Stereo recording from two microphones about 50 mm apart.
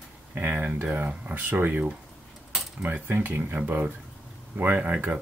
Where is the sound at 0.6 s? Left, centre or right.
Right.